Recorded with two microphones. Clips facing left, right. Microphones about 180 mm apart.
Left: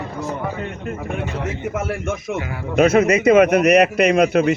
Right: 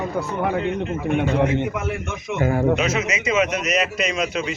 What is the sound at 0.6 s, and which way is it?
Speech, 50° left (ahead or behind).